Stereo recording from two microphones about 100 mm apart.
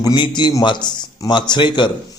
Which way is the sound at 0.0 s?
45° left (ahead or behind).